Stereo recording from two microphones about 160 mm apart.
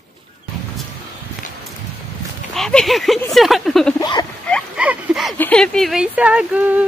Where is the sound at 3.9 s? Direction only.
25° left (ahead or behind).